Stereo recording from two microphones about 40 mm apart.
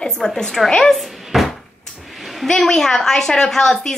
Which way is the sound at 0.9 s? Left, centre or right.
Centre.